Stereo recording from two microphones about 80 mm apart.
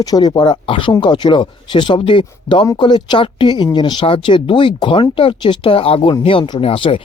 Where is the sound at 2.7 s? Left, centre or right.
Left.